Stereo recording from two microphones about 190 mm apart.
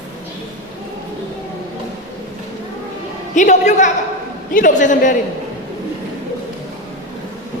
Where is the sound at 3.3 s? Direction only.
40° left (ahead or behind).